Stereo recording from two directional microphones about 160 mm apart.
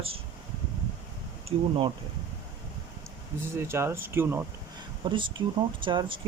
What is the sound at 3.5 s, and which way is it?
Speech, 15° right (ahead or behind).